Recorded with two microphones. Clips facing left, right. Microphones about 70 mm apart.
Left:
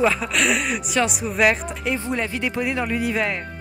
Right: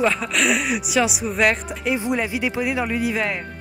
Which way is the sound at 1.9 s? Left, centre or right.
Centre.